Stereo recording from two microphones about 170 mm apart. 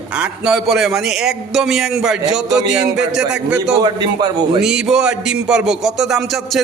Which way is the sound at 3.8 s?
25° right (ahead or behind).